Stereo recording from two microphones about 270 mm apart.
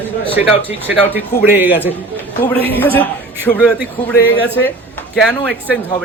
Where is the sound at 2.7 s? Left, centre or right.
Centre.